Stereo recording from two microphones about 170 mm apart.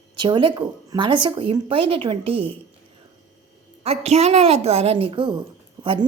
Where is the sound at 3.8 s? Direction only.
40° right (ahead or behind).